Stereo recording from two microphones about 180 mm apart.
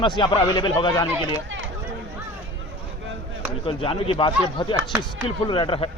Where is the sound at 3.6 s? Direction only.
30° left (ahead or behind).